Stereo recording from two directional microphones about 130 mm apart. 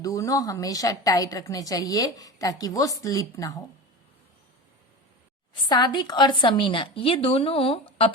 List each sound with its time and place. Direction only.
0.0 s a woman's voice: 25° left (ahead or behind)
5.6 s a woman's voice: 30° left (ahead or behind)